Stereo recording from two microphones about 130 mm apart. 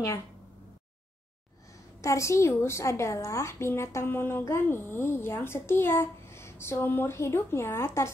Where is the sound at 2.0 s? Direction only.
25° left (ahead or behind).